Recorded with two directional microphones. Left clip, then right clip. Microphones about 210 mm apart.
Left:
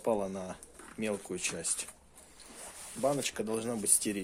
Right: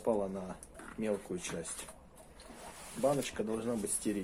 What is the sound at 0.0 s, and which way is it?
Speech, 45° left (ahead or behind).